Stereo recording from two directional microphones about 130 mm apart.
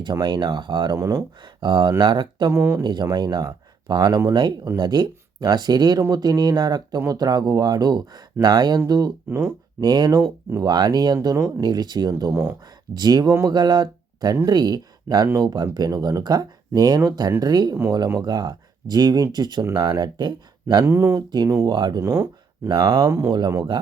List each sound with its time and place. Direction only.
0.0 s speech: 35° right (ahead or behind)
0.9 s speech: 25° right (ahead or behind)
1.6 s speech: 35° right (ahead or behind)
2.5 s speech: 20° right (ahead or behind)
2.8 s speech: 35° right (ahead or behind)
12.3 s speech: 20° right (ahead or behind)
12.9 s speech: 30° right (ahead or behind)
20.8 s speech: 20° right (ahead or behind)
22.1 s a sound: 15° right (ahead or behind)
22.7 s speech: 30° right (ahead or behind)